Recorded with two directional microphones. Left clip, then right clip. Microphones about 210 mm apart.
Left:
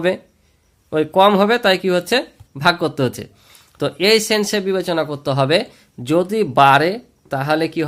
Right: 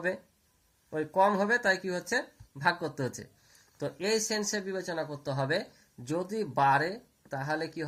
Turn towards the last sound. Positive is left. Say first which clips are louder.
# left 15 dB
turn(degrees=35)  # may be behind; listen again after turning